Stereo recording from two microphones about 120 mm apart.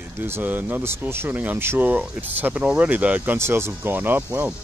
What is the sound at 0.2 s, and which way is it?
Speech, 15° right (ahead or behind).